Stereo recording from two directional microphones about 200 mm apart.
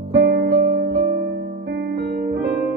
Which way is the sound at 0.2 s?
55° right (ahead or behind).